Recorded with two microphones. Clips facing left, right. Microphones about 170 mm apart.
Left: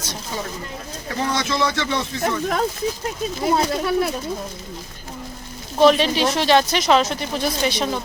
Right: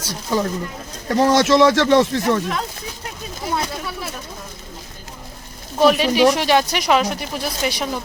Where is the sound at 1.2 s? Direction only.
80° right.